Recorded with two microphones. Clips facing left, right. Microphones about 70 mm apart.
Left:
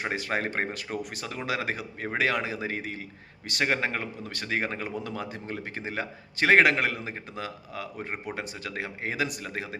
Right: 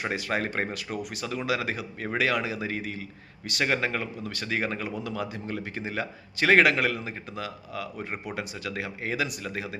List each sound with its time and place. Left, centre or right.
0.0 s speech: left